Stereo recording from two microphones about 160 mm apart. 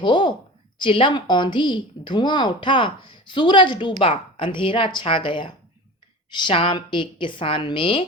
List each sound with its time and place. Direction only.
0.0 s a woman's voice: 30° left (ahead or behind)